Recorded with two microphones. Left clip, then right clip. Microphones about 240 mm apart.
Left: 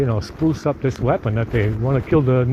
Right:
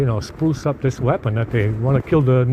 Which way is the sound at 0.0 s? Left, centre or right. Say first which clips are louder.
Left 1 dB; right.